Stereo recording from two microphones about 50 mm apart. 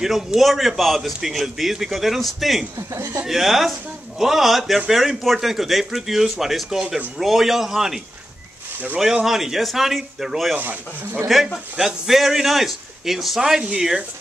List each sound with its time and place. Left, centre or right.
0.4 s a man's voice: centre
2.9 s speech: right
3.3 s a man's voice: centre
13.4 s speech: centre